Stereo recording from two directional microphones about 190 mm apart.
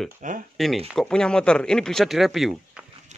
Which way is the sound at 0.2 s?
45° right (ahead or behind).